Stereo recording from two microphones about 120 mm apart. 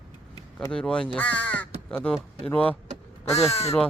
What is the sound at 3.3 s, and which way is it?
Speech, 60° left (ahead or behind).